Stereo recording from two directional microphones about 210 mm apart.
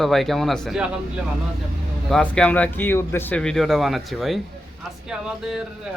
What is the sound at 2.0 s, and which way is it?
Speech, 5° left (ahead or behind).